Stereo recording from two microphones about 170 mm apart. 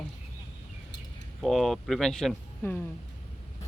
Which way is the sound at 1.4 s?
Centre (ahead or behind).